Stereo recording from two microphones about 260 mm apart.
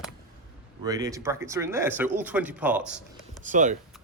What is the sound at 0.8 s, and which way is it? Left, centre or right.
Speech, centre.